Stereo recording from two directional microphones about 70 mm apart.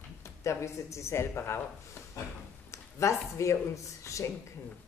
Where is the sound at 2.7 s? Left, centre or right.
Left.